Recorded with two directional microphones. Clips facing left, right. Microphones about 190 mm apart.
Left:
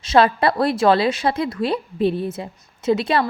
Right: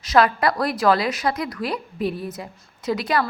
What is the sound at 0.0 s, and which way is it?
A woman's voice, 25° left (ahead or behind).